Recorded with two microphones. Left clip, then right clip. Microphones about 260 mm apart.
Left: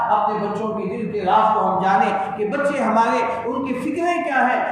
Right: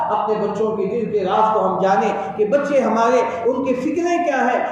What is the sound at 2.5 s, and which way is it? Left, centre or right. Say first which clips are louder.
Speech: right 2 dB; left.